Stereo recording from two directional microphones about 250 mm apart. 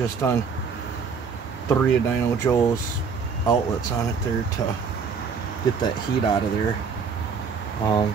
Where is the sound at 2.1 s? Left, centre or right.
Centre.